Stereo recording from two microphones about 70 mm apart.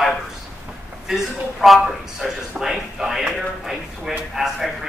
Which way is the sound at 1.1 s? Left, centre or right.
Centre.